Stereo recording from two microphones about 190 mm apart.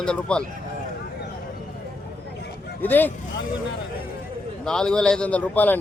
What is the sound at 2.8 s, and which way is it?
Speech, 10° left (ahead or behind).